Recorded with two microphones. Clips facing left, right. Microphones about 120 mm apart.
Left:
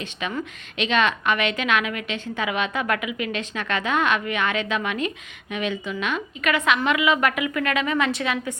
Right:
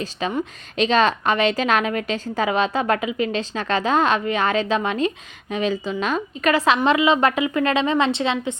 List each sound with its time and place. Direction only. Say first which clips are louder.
0.0 s a woman's voice: right 5 dB; 35° right (ahead or behind)